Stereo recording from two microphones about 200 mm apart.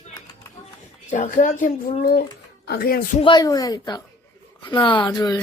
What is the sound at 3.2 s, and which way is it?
Speech, 20° left (ahead or behind).